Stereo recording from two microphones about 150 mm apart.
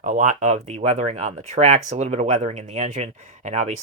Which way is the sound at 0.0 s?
55° right (ahead or behind).